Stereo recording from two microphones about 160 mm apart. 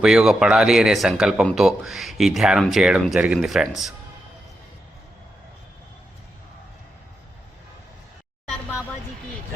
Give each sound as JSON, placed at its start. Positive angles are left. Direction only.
{"t": 0.0, "sound": "speech", "side_deg": -5}